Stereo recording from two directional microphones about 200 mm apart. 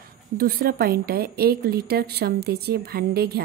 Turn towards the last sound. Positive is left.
turn(degrees=-50)  # may be behind; listen again after turning